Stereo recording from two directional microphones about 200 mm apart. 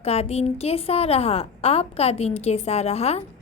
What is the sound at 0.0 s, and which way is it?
A woman's voice, 30° left (ahead or behind).